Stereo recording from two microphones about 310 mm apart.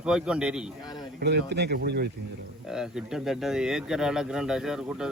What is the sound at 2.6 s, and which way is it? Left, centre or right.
A man's voice, centre.